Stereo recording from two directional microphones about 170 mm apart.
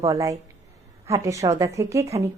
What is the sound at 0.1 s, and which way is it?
A woman's voice, 20° right (ahead or behind).